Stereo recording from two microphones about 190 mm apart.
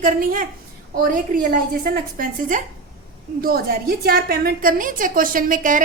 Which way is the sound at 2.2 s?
50° right (ahead or behind).